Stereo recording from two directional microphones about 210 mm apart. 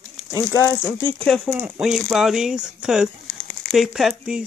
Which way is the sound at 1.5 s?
5° right (ahead or behind).